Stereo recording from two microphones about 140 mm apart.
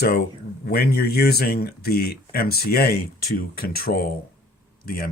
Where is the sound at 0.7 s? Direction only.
90° left.